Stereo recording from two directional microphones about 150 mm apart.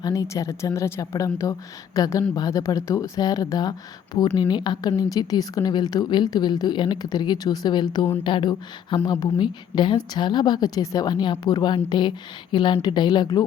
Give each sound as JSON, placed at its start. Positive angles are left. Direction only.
{"t": 0.0, "sound": "a woman's voice", "side_deg": 25}